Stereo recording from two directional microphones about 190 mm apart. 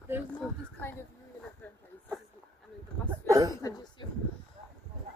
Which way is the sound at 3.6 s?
20° left (ahead or behind).